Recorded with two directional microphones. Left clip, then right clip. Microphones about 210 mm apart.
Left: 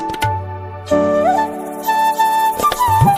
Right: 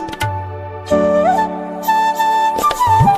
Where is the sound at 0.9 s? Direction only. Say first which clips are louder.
Right 1 dB; centre (ahead or behind).